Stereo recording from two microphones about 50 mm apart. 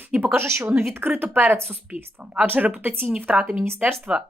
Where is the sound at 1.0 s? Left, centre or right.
Right.